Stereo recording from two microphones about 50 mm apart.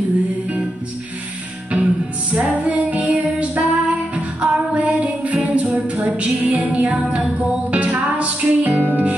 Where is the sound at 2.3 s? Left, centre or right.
Right.